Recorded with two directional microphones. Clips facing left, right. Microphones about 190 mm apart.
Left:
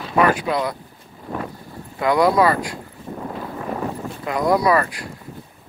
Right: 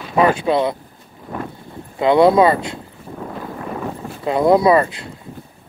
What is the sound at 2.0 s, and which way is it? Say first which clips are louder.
Speech: right 5 dB; 25° right (ahead or behind).